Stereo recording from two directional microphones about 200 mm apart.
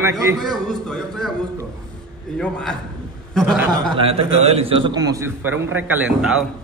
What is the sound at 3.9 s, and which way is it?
A man's voice, 30° right (ahead or behind).